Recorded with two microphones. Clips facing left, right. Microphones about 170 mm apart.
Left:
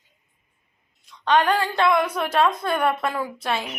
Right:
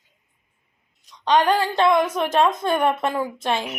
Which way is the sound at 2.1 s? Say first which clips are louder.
Right 2 dB; 20° right (ahead or behind).